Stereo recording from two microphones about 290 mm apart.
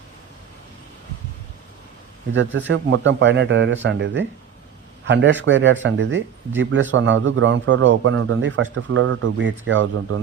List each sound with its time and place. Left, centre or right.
2.3 s a man's voice: right